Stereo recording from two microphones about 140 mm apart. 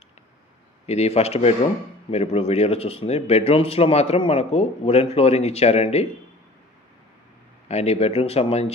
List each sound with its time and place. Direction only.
0.8 s speech: 50° left (ahead or behind)
7.6 s speech: 50° left (ahead or behind)